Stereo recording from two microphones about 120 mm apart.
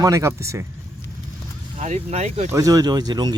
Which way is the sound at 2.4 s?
25° right (ahead or behind).